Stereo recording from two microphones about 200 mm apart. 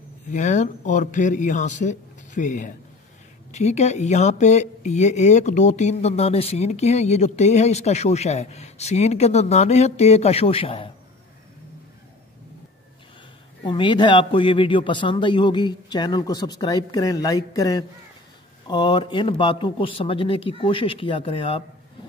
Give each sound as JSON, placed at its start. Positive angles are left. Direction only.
{"t": 0.3, "sound": "speech", "side_deg": 35}
{"t": 13.7, "sound": "a man's voice", "side_deg": 25}